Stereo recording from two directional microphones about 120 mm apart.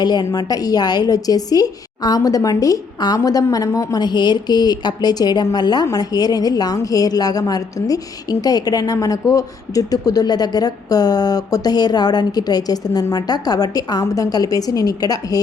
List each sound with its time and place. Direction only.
0.0 s a woman's voice: 35° left (ahead or behind)